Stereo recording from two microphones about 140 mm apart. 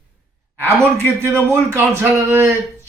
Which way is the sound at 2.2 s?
15° right (ahead or behind).